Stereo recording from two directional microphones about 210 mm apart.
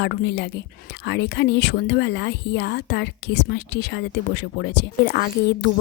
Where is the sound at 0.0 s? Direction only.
55° left (ahead or behind).